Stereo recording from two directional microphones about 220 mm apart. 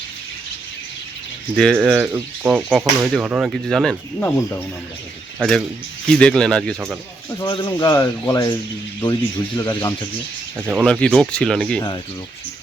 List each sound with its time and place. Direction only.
1.7 s speech: 10° right (ahead or behind)
7.3 s speech: 20° left (ahead or behind)
9.6 s speech: 15° left (ahead or behind)
10.6 s speech: 5° right (ahead or behind)